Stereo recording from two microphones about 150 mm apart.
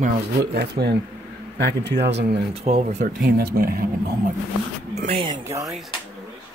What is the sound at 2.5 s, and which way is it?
Speech, 45° right (ahead or behind).